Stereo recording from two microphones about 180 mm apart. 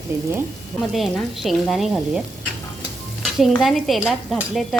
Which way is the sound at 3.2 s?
Centre (ahead or behind).